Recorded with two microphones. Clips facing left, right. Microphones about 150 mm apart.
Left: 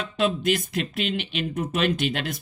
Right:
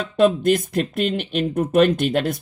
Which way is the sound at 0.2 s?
55° right (ahead or behind).